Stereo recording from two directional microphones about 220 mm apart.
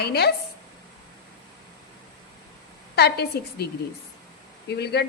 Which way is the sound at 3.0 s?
45° left (ahead or behind).